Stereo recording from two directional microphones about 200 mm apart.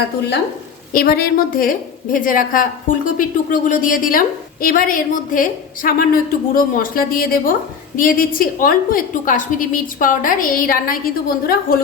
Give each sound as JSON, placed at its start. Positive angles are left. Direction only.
{"t": 0.9, "sound": "a woman's voice", "side_deg": 50}